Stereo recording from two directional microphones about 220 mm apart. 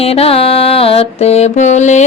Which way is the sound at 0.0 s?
25° left (ahead or behind).